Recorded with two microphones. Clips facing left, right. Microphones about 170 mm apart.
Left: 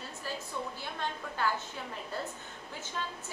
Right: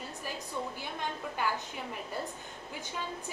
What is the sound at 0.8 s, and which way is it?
Speech, 15° right (ahead or behind).